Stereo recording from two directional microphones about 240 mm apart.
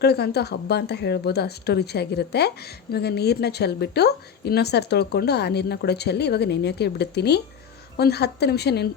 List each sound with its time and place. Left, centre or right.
0.0 s a woman's voice: left